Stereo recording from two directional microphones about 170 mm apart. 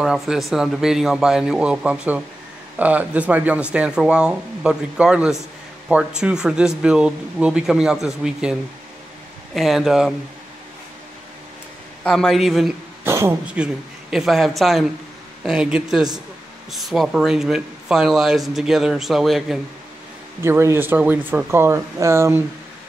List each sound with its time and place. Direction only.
0.0 s a man's voice: centre (ahead or behind)
12.0 s a man's voice: 5° left (ahead or behind)
13.0 s a man's voice: 15° right (ahead or behind)
20.4 s speech: 15° right (ahead or behind)